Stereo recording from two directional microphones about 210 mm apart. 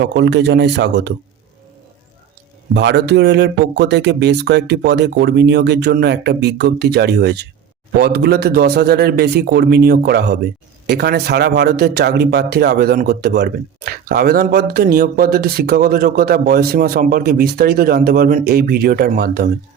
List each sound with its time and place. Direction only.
0.0 s speech: 55° right (ahead or behind)
2.7 s speech: 55° right (ahead or behind)